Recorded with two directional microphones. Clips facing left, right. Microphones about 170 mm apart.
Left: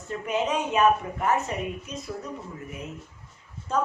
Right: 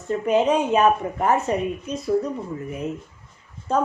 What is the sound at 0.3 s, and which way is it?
Speech, 35° right (ahead or behind).